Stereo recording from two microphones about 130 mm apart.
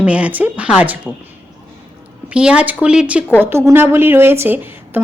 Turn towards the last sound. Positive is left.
turn(degrees=-15)  # may be behind; listen again after turning